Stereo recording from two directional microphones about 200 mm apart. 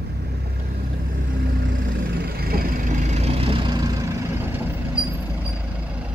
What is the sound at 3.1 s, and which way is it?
Vehicle, 30° right (ahead or behind).